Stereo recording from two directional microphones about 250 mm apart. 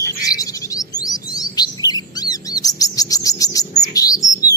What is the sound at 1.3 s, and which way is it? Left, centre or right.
Chirp, centre.